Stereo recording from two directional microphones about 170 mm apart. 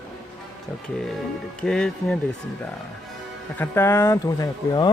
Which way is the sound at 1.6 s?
5° left (ahead or behind).